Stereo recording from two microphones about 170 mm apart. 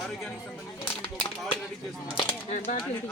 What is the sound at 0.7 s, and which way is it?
Speech, 10° left (ahead or behind).